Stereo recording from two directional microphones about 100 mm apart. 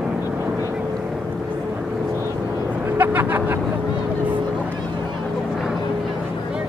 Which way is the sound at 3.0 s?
20° right (ahead or behind).